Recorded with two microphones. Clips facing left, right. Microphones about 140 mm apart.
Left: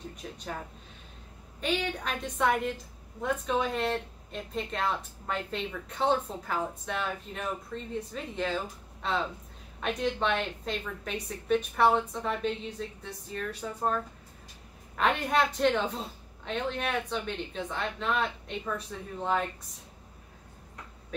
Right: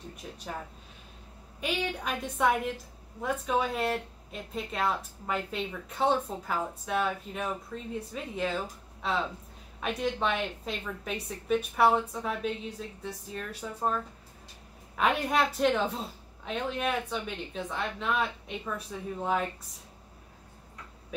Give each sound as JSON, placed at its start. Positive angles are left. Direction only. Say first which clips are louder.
{"t": 0.2, "sound": "speech", "louder": "left 1 dB", "side_deg": -5}
{"t": 1.6, "sound": "a woman's voice", "louder": "left 1 dB", "side_deg": -5}
{"t": 15.0, "sound": "a woman's voice", "louder": "even", "side_deg": -5}